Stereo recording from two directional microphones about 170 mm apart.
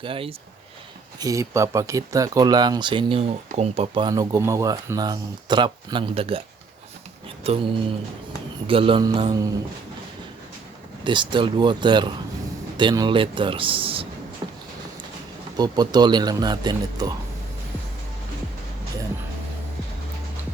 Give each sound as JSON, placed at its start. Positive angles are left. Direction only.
{"t": 0.0, "sound": "speech", "side_deg": -35}
{"t": 1.2, "sound": "speech", "side_deg": -20}
{"t": 7.4, "sound": "speech", "side_deg": -35}
{"t": 11.0, "sound": "speech", "side_deg": -30}
{"t": 15.5, "sound": "speech", "side_deg": -25}